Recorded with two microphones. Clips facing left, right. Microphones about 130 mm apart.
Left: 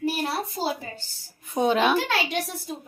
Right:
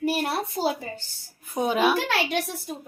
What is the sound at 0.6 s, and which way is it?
A woman's voice, 5° right (ahead or behind).